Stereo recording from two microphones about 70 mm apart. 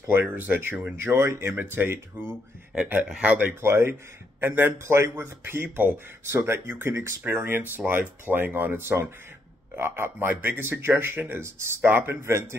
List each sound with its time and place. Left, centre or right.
0.1 s a man's voice: right
3.2 s speech: centre
3.6 s a man's voice: right
12.2 s a man's voice: right